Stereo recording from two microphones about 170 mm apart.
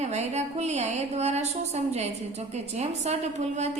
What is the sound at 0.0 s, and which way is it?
A woman's voice, 40° right (ahead or behind).